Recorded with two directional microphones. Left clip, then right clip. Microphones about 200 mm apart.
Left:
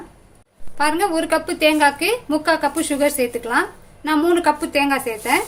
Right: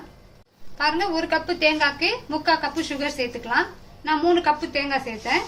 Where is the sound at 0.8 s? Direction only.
55° left (ahead or behind).